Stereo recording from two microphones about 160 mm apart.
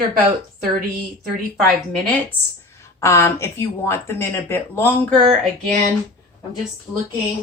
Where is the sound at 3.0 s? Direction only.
15° left (ahead or behind).